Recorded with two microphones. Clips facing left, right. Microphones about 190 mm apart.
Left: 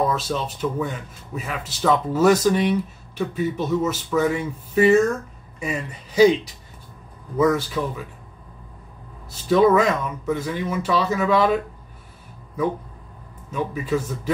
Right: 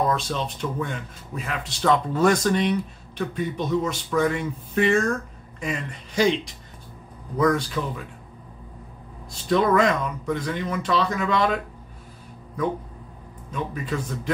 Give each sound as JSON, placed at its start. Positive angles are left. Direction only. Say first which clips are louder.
{"t": 0.1, "sound": "speech", "louder": "left 1 dB", "side_deg": 5}
{"t": 9.3, "sound": "speech", "louder": "left 4 dB", "side_deg": 5}
{"t": 13.5, "sound": "speech", "louder": "left 5 dB", "side_deg": 5}